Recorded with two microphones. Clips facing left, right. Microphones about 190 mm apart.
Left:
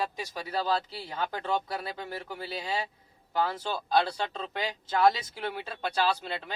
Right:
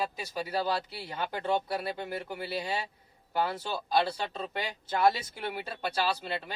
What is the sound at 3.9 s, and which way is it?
Speech, 5° right (ahead or behind).